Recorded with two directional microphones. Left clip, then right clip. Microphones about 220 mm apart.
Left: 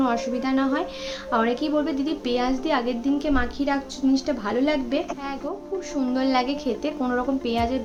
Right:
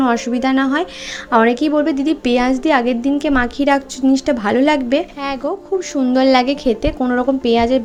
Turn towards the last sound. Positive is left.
turn(degrees=-30)  # may be behind; listen again after turning